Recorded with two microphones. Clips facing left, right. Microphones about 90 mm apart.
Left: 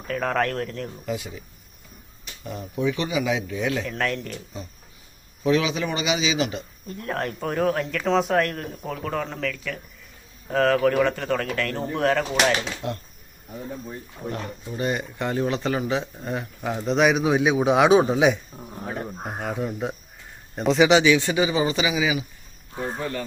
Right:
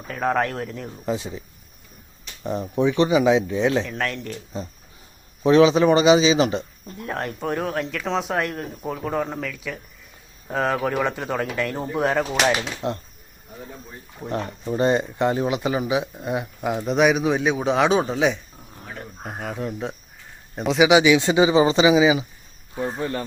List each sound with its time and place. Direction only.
0.1 s speech: 10° right (ahead or behind)
1.0 s speech: 30° right (ahead or behind)
3.8 s speech: centre (ahead or behind)
4.5 s a man's voice: 35° right (ahead or behind)
7.0 s speech: centre (ahead or behind)
12.8 s speech: 25° right (ahead or behind)
14.3 s speech: 40° right (ahead or behind); by 18.3 s 5° left (ahead or behind)
18.8 s a sound: 25° left (ahead or behind)
19.2 s speech: centre (ahead or behind); by 23.2 s 25° right (ahead or behind)